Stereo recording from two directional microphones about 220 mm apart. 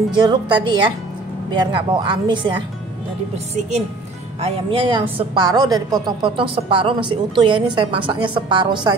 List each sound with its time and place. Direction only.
0.1 s a woman's voice: 20° right (ahead or behind)
4.4 s a woman's voice: 25° right (ahead or behind)